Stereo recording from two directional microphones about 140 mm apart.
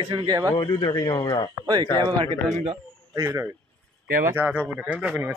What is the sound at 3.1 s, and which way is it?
Speech, 20° right (ahead or behind).